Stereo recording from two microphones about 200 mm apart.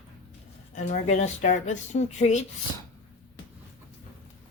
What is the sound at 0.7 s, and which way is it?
Speech, 40° left (ahead or behind).